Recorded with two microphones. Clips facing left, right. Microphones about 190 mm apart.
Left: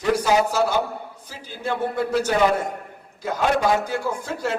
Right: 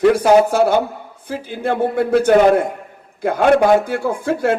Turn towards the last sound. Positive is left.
turn(degrees=-55)  # may be behind; listen again after turning